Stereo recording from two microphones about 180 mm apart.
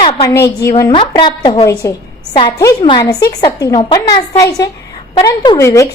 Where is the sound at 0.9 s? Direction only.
30° left (ahead or behind).